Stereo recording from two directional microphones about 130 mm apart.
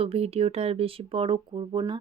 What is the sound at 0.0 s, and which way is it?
Speech, 50° right (ahead or behind).